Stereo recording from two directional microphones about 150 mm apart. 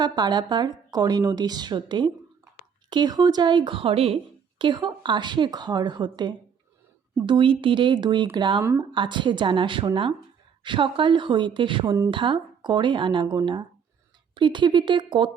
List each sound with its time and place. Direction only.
0.0 s a woman's voice: 30° right (ahead or behind)
11.9 s a woman's voice: 20° right (ahead or behind)
12.1 s a woman's voice: 35° right (ahead or behind)